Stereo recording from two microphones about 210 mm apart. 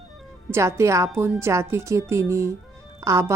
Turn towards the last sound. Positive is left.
turn(degrees=-15)  # may be behind; listen again after turning